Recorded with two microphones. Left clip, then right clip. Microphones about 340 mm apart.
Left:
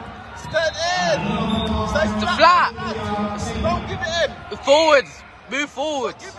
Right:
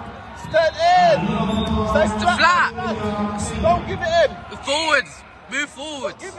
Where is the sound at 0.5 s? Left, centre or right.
Centre.